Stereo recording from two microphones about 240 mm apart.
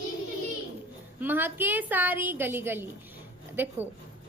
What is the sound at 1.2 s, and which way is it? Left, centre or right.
A woman's voice, centre.